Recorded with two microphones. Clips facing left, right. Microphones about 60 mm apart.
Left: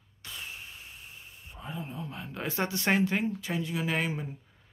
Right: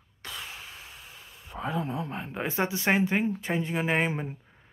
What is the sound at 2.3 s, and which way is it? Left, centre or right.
Speech, centre.